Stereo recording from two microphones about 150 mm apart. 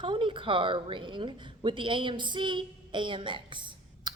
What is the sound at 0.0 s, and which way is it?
A woman's voice, 35° right (ahead or behind).